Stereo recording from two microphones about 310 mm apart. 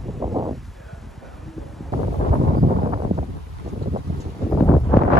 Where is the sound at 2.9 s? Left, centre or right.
Right.